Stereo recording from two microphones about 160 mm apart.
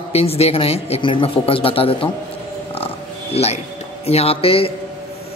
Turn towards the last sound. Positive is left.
turn(degrees=35)  # may be behind; listen again after turning